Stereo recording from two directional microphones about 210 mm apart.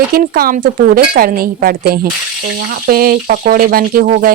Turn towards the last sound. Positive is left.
turn(degrees=-40)  # may be behind; listen again after turning